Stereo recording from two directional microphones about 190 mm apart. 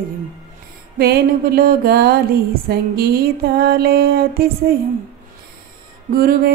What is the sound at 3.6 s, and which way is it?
Speech, 55° right (ahead or behind).